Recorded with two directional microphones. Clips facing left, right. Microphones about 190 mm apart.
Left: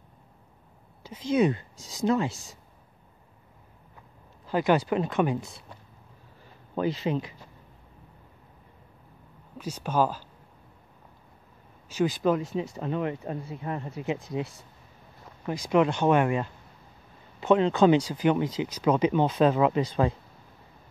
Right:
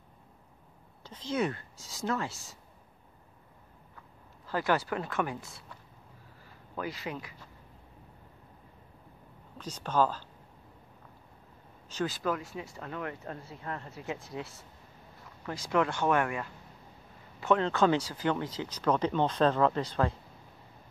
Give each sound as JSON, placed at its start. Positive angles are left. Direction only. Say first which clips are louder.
{"t": 1.0, "sound": "speech", "louder": "left 8 dB", "side_deg": 10}
{"t": 4.5, "sound": "speech", "louder": "left 6 dB", "side_deg": 15}
{"t": 9.6, "sound": "speech", "louder": "left 2 dB", "side_deg": 10}
{"t": 11.9, "sound": "speech", "louder": "left 7 dB", "side_deg": 15}